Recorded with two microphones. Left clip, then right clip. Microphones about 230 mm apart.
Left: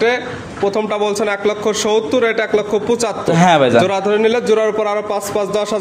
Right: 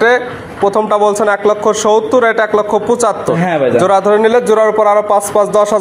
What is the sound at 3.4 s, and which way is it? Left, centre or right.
Speech, left.